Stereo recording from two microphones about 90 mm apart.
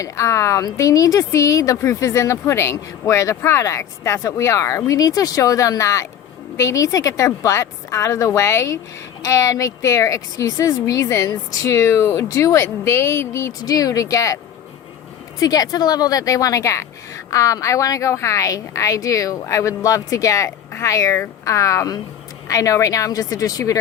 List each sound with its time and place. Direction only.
0.0 s a woman's voice: 35° left (ahead or behind)
15.4 s a woman's voice: 45° left (ahead or behind)